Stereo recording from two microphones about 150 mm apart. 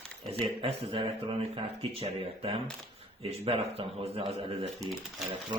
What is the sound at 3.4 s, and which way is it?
Speech, 40° right (ahead or behind).